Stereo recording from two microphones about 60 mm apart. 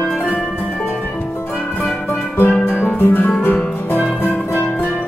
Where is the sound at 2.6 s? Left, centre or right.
Left.